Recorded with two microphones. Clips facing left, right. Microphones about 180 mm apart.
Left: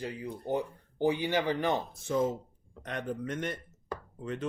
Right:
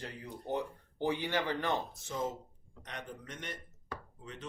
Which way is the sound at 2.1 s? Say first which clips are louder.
Left 8 dB; 60° left (ahead or behind).